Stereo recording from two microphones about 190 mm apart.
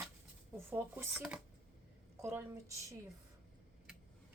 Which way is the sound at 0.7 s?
10° right (ahead or behind).